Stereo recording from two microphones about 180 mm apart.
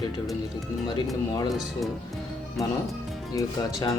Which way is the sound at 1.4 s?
Centre (ahead or behind).